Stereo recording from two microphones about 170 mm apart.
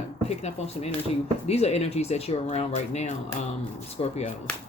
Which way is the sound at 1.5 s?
40° left (ahead or behind).